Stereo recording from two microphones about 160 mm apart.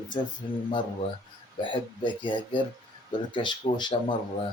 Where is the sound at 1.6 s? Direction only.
30° left (ahead or behind).